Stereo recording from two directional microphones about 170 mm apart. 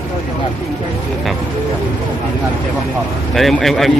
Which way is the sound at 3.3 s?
Centre (ahead or behind).